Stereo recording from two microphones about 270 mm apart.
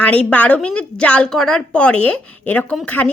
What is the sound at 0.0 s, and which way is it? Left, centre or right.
A woman's voice, centre.